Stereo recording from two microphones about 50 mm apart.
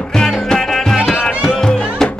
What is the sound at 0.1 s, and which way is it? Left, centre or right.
Music, centre.